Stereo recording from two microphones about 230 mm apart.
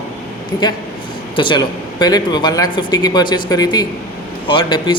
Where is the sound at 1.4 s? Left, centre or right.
Centre.